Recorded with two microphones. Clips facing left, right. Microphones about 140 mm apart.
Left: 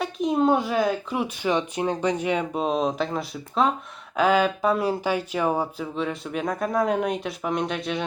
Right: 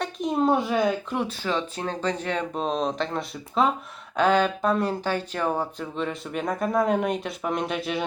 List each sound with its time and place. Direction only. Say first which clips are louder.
0.0 s speech: left 2 dB; centre (ahead or behind)